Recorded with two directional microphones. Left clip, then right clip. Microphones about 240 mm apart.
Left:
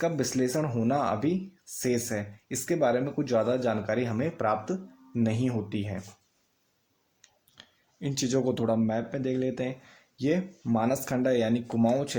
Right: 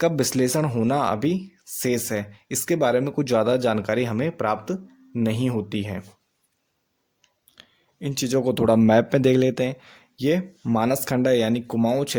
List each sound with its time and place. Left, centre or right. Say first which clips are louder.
0.0 s speech: right 6 dB; right
7.2 s speech: right 3 dB; right